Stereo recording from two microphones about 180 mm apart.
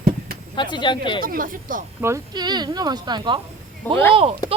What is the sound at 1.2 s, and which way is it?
Speech, 50° right (ahead or behind).